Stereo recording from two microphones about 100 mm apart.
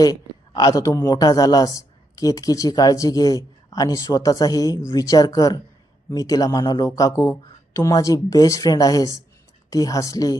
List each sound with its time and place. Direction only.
0.0 s a man's voice: 40° left (ahead or behind)